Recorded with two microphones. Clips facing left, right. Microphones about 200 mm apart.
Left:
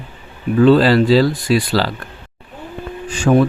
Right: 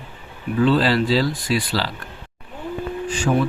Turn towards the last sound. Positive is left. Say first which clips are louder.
# left 7 dB
turn(degrees=70)  # may be behind; listen again after turning